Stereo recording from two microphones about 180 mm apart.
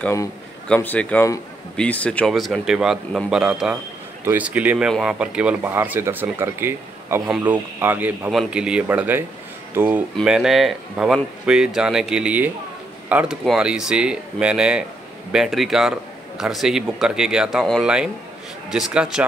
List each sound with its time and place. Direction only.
0.0 s speech: 15° left (ahead or behind); by 19.2 s 5° right (ahead or behind)